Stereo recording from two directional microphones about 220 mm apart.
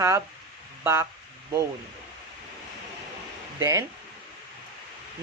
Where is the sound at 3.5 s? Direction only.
15° right (ahead or behind).